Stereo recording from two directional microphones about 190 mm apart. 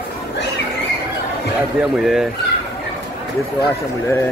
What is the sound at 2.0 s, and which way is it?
Speech, centre (ahead or behind).